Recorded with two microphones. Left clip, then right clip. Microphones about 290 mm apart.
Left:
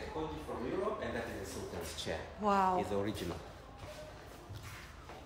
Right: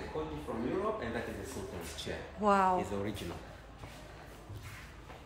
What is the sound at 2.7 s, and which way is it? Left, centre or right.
Speech, left.